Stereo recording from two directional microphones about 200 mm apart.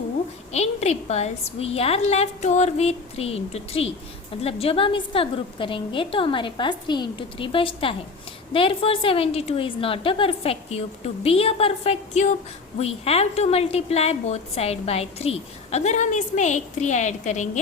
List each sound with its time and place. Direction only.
0.5 s a woman's voice: 35° left (ahead or behind)